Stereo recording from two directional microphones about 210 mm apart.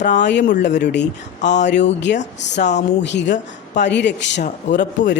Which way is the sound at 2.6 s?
35° left (ahead or behind).